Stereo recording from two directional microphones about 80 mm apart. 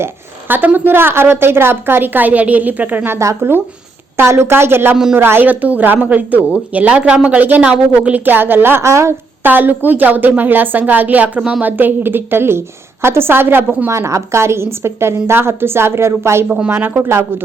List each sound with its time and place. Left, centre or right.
0.0 s a woman's voice: right
3.2 s a woman's voice: right
9.4 s a woman's voice: right
13.9 s a woman's voice: right
16.5 s speech: centre
17.0 s a woman's voice: right